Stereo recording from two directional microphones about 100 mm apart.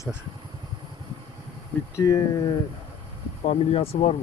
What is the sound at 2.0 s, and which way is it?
Speech, 35° left (ahead or behind).